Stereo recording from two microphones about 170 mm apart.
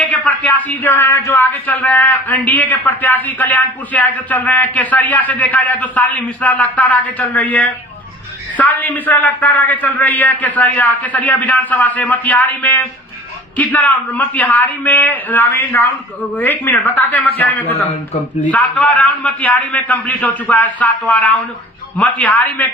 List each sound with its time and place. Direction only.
0.1 s a man's voice: 10° left (ahead or behind)